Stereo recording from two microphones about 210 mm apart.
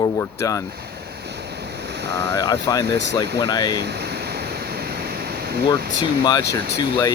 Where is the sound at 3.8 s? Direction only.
50° right (ahead or behind).